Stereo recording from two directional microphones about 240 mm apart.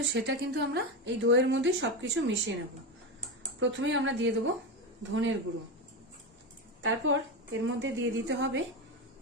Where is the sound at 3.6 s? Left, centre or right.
Right.